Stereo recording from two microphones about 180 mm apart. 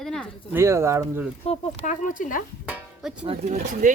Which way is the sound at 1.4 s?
35° left (ahead or behind).